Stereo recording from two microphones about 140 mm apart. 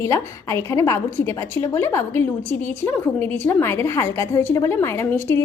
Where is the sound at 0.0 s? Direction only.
20° left (ahead or behind).